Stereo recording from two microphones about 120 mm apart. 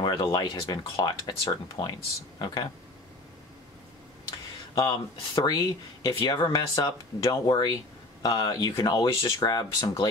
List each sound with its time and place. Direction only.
0.0 s speech: 35° left (ahead or behind)
4.7 s speech: 30° left (ahead or behind)